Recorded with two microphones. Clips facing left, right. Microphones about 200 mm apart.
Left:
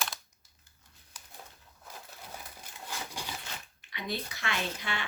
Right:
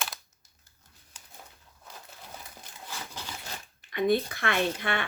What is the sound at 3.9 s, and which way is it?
Speech, 50° right (ahead or behind).